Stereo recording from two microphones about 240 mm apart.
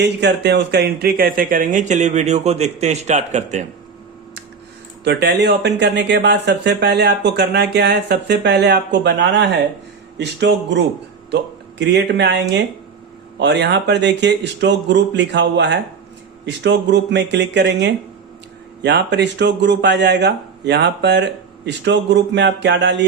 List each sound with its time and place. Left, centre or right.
0.0 s speech: right
5.0 s speech: right